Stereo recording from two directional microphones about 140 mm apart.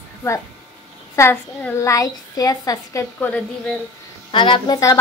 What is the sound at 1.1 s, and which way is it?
A woman's voice, 20° left (ahead or behind).